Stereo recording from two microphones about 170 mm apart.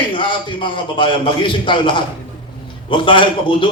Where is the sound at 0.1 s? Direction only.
30° left (ahead or behind).